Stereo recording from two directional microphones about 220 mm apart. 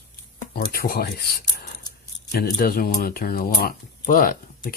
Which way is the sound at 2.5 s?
40° left (ahead or behind).